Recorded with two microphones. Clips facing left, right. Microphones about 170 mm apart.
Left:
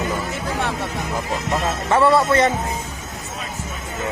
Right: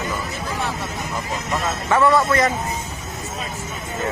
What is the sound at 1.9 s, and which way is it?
Speech, 30° left (ahead or behind).